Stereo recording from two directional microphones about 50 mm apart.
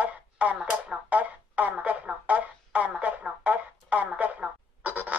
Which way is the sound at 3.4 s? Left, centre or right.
Right.